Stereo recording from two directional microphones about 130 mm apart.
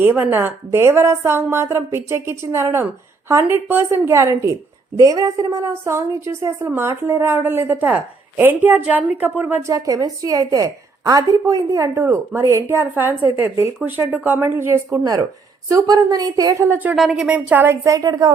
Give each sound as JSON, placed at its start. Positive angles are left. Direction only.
{"t": 0.0, "sound": "a woman's voice", "side_deg": -15}
{"t": 15.7, "sound": "a woman's voice", "side_deg": -30}
{"t": 16.9, "sound": "speech", "side_deg": -5}
{"t": 17.8, "sound": "a woman's voice", "side_deg": -30}